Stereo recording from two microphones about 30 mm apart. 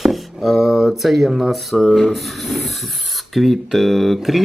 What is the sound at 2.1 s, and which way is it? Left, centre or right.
Filing, centre.